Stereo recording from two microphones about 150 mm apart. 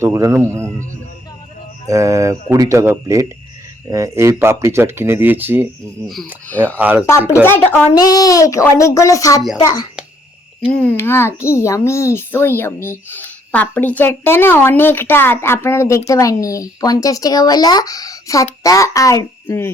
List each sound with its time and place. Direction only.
0.0 s speech: 20° right (ahead or behind)
1.9 s speech: 20° right (ahead or behind)
6.7 s speech: 10° right (ahead or behind)
7.4 s a child's voice: 10° left (ahead or behind)
7.9 s speech: 25° left (ahead or behind)
10.7 s a child's voice: 10° left (ahead or behind)